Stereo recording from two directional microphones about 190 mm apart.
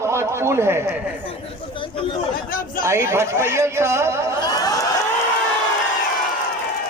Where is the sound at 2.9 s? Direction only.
15° right (ahead or behind).